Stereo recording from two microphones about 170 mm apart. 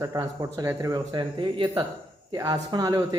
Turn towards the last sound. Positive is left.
turn(degrees=-20)  # may be behind; listen again after turning